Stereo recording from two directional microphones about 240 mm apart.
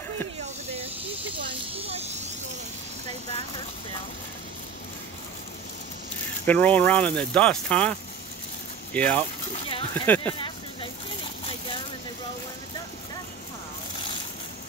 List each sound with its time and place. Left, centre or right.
0.7 s snake: right
3.3 s vehicle: left
6.4 s speech: centre
8.9 s speech: centre
10.4 s a sound: left